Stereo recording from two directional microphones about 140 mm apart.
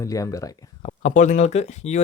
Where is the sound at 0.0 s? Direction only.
25° left (ahead or behind).